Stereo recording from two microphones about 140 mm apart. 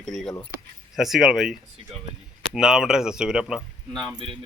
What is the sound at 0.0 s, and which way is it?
A man's voice, centre (ahead or behind).